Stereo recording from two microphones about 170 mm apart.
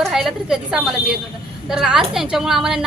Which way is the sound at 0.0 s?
Centre (ahead or behind).